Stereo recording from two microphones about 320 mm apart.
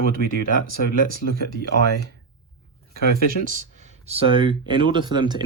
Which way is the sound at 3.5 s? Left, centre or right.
Right.